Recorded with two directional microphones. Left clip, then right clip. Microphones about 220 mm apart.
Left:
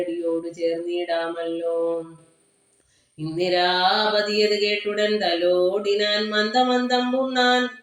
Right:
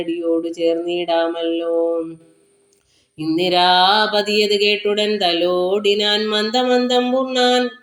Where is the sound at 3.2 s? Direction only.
25° right (ahead or behind).